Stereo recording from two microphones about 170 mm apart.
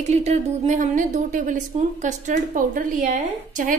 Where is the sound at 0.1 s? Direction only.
40° right (ahead or behind).